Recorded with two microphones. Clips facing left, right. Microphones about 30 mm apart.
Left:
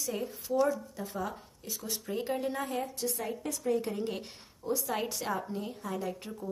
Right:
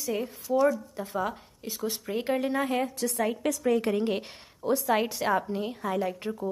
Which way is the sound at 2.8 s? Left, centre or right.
Right.